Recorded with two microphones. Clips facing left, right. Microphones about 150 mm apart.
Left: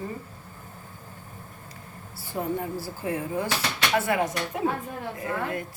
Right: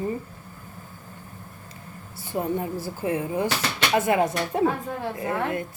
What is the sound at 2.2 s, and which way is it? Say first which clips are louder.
A woman's voice: right 3 dB; 20° right (ahead or behind).